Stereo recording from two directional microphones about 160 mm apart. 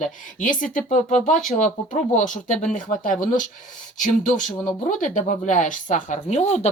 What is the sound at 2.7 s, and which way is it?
Speech, 55° left (ahead or behind).